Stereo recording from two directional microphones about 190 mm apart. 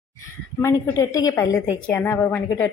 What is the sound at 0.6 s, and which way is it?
A woman's voice, 15° left (ahead or behind).